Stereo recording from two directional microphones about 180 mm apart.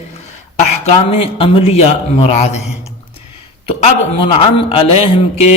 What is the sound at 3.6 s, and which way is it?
A man's voice, 35° left (ahead or behind).